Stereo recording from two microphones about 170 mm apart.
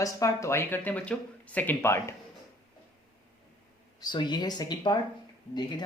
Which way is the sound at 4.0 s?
25° left (ahead or behind).